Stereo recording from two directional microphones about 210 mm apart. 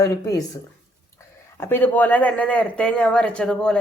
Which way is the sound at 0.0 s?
15° left (ahead or behind).